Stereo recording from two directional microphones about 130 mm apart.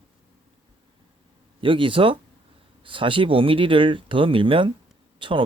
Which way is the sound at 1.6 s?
40° right (ahead or behind).